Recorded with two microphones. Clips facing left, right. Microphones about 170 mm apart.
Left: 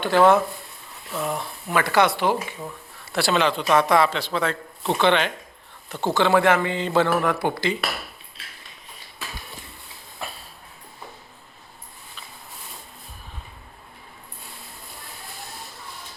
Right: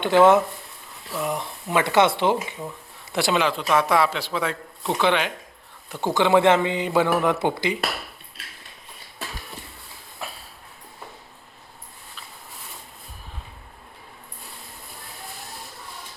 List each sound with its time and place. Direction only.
0.0 s a man's voice: 20° right (ahead or behind)
3.4 s a man's voice: 5° right (ahead or behind)
10.2 s a sound: 5° right (ahead or behind)